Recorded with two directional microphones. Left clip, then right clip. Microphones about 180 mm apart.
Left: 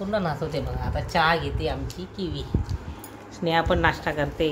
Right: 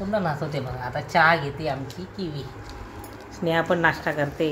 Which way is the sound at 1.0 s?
15° right (ahead or behind).